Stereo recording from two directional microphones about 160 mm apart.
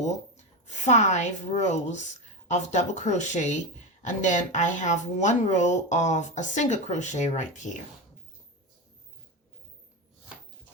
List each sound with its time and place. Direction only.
0.0 s a woman's voice: 45° left (ahead or behind)